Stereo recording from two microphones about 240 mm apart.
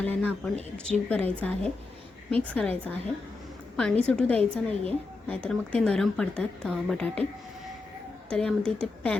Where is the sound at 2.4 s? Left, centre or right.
Centre.